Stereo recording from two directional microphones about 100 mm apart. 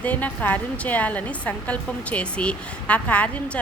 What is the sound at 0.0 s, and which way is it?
A woman's voice, 15° left (ahead or behind).